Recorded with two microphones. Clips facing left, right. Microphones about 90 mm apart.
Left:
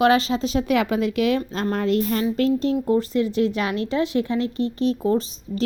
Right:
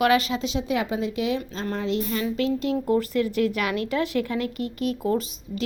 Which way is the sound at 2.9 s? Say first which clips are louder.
Even; 25° left (ahead or behind).